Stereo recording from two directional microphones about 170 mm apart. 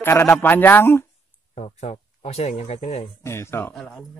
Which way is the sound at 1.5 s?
40° left (ahead or behind).